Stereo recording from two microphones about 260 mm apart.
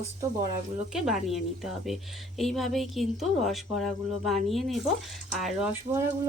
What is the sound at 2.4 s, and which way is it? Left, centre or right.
Speech, centre.